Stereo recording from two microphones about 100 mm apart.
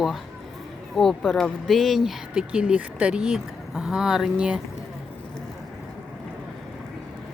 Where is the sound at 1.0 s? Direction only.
Centre (ahead or behind).